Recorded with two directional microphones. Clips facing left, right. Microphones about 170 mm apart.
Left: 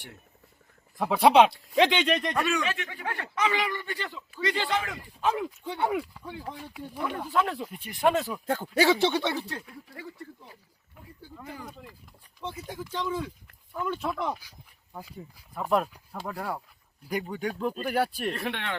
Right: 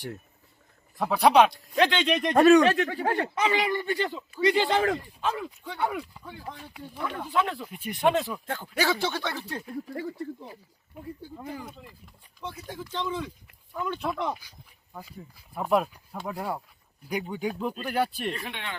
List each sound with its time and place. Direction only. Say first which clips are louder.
1.1 s speech: even; 25° left (ahead or behind)
2.3 s speech: right 11 dB; 40° right (ahead or behind)
4.4 s speech: right 6 dB; 15° right (ahead or behind)
4.7 s speech: right 6 dB; 40° right (ahead or behind)
5.3 s speech: left 3 dB; 20° left (ahead or behind)
6.0 s speech: left 3 dB; centre (ahead or behind)
8.6 s speech: left 4 dB; 25° left (ahead or behind)
9.6 s speech: right 10 dB; 40° right (ahead or behind)
11.4 s speech: right 2 dB; centre (ahead or behind)
15.5 s speech: right 1 dB; 5° right (ahead or behind)
17.1 s speech: right 1 dB; centre (ahead or behind)
18.3 s speech: left 4 dB; 65° left (ahead or behind)